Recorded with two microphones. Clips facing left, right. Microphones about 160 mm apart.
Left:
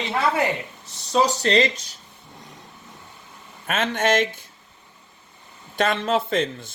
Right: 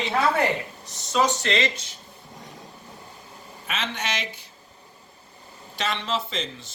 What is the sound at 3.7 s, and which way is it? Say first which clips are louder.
Speech: left 9 dB; 50° left (ahead or behind).